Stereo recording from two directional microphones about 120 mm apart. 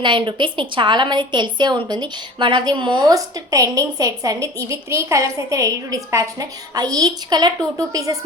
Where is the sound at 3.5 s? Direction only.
30° right (ahead or behind).